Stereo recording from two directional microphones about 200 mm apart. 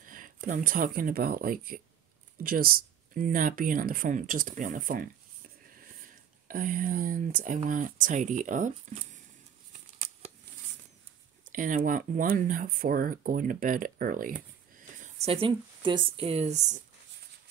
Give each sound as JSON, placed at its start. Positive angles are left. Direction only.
{"t": 0.0, "sound": "speech", "side_deg": -40}
{"t": 6.4, "sound": "speech", "side_deg": -45}
{"t": 9.7, "sound": "a sound", "side_deg": -35}
{"t": 11.5, "sound": "speech", "side_deg": -40}